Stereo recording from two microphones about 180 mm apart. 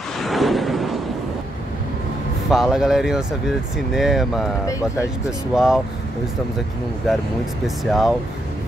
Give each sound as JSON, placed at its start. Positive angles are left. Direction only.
{"t": 0.2, "sound": "a sound", "side_deg": 0}
{"t": 2.5, "sound": "speech", "side_deg": 0}
{"t": 4.6, "sound": "speech", "side_deg": 20}
{"t": 5.5, "sound": "speech", "side_deg": 0}
{"t": 7.6, "sound": "speech", "side_deg": 0}